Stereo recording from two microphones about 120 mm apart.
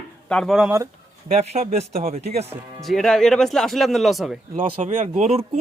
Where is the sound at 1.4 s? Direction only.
60° right (ahead or behind).